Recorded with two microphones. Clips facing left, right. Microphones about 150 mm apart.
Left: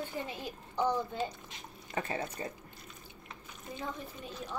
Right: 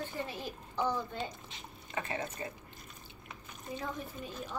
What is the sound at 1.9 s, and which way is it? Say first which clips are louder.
Speech: left 2 dB; 35° left (ahead or behind).